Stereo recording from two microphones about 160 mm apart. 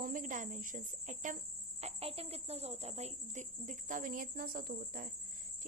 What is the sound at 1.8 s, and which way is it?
Speech, 40° right (ahead or behind).